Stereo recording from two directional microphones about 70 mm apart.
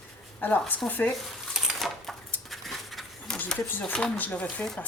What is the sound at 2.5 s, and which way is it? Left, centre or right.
Patter, centre.